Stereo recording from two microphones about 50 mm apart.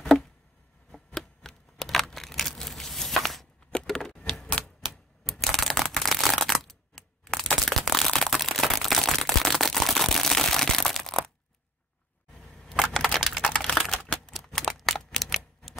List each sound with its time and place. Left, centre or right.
0.9 s a sound: centre
4.5 s typewriter: centre
5.2 s shuffling cards: centre
8.3 s a sound: centre
12.4 s a sound: centre
13.0 s typing: centre
13.4 s typing: centre
14.0 s crumpling: centre
14.3 s typewriter: centre